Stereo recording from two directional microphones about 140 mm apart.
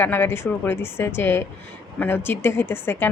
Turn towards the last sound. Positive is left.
turn(degrees=15)  # may be behind; listen again after turning